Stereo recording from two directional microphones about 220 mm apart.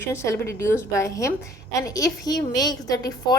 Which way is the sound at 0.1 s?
10° left (ahead or behind).